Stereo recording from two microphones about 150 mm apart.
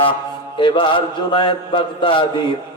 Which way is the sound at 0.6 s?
35° left (ahead or behind).